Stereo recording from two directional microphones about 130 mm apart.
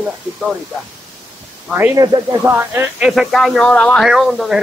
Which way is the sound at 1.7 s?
20° right (ahead or behind).